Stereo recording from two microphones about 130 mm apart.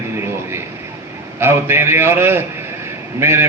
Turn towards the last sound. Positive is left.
turn(degrees=-20)  # may be behind; listen again after turning